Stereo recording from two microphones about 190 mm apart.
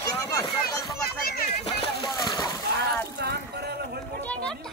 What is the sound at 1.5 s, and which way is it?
Speech, 35° left (ahead or behind).